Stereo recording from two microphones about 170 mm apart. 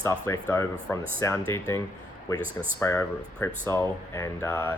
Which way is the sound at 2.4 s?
10° right (ahead or behind).